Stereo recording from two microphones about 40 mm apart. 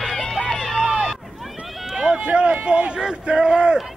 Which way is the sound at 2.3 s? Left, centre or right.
Right.